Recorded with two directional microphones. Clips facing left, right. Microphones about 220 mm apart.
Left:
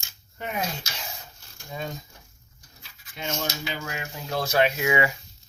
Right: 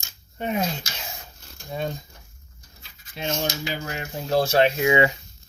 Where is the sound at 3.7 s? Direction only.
35° right (ahead or behind).